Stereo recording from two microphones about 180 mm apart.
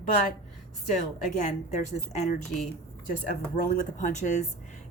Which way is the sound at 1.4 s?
40° left (ahead or behind).